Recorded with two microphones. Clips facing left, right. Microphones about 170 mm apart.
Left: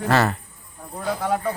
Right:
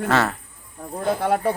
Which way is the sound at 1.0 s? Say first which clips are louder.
Right 3 dB; 55° right (ahead or behind).